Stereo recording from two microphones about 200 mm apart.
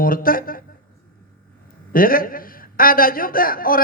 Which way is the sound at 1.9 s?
45° left (ahead or behind).